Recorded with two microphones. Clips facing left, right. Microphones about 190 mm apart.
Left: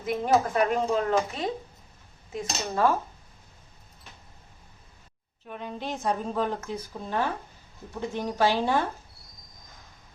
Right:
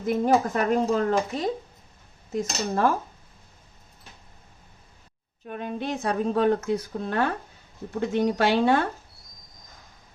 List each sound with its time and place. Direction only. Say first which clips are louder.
0.0 s speech: right 2 dB; 45° right (ahead or behind)
2.3 s speech: right 4 dB; 45° right (ahead or behind)
5.5 s a woman's voice: right 4 dB; 55° right (ahead or behind)